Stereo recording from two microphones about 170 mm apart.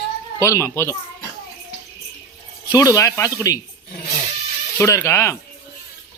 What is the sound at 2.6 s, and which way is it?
Speech, 20° left (ahead or behind).